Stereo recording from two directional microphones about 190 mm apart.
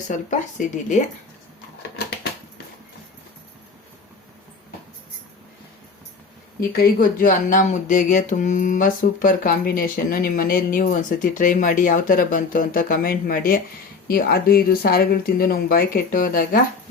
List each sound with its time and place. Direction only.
0.1 s a woman's voice: 40° left (ahead or behind)
6.7 s speech: 50° left (ahead or behind)